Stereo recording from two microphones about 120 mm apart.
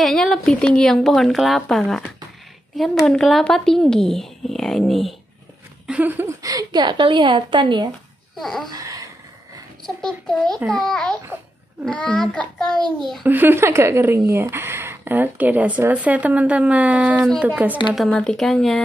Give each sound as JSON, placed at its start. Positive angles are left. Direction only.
{"t": 0.0, "sound": "speech", "side_deg": 0}
{"t": 5.9, "sound": "speech", "side_deg": -15}
{"t": 6.4, "sound": "speech", "side_deg": -35}
{"t": 8.4, "sound": "speech", "side_deg": 0}
{"t": 8.6, "sound": "a sound", "side_deg": -30}
{"t": 9.8, "sound": "a child's voice", "side_deg": 5}
{"t": 13.2, "sound": "speech", "side_deg": -15}
{"t": 17.9, "sound": "speech", "side_deg": 5}